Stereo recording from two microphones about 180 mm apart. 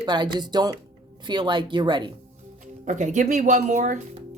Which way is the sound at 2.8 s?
45° right (ahead or behind).